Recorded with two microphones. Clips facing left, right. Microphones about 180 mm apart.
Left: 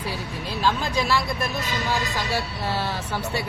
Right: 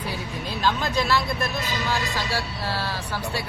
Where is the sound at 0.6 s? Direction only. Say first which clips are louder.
Even; 10° left (ahead or behind).